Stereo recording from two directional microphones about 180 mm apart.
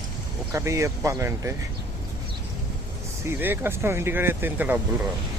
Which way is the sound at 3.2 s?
10° right (ahead or behind).